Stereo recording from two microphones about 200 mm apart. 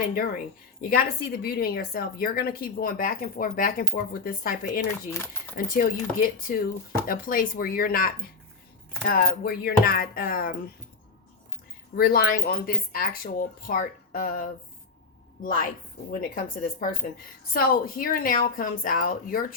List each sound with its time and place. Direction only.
0.0 s a woman's voice: 45° left (ahead or behind)
11.9 s a woman's voice: 50° left (ahead or behind)
16.3 s a woman's voice: 45° left (ahead or behind)